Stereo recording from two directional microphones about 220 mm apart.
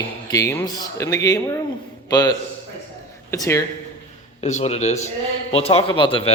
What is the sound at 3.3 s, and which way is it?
Speech, 15° left (ahead or behind).